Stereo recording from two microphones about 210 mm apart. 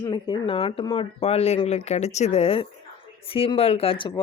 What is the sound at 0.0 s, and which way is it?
Speech, 20° left (ahead or behind).